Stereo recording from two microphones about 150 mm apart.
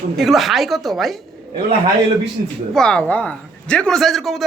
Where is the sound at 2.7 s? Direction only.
5° left (ahead or behind).